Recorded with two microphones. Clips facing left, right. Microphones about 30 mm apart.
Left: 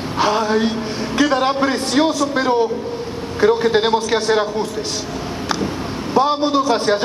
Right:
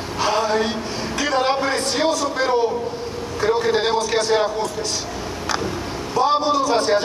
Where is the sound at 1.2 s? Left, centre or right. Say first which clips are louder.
Left 4 dB; left.